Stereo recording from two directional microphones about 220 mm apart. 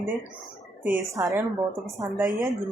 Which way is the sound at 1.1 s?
15° right (ahead or behind).